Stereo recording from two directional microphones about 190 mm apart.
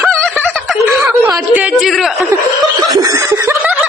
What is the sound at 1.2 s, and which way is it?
Speech, 10° right (ahead or behind).